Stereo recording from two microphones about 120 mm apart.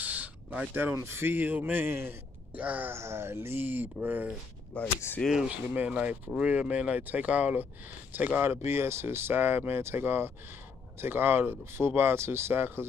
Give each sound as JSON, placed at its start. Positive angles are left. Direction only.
{"t": 0.0, "sound": "speech", "side_deg": -15}
{"t": 4.7, "sound": "speech", "side_deg": 15}
{"t": 5.7, "sound": "speech", "side_deg": -15}